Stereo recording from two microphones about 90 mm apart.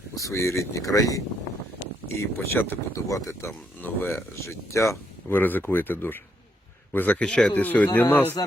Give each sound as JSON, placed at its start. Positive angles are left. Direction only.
{"t": 0.2, "sound": "speech", "side_deg": 35}
{"t": 3.8, "sound": "speech", "side_deg": 20}
{"t": 4.4, "sound": "speech", "side_deg": 35}
{"t": 5.4, "sound": "speech", "side_deg": 20}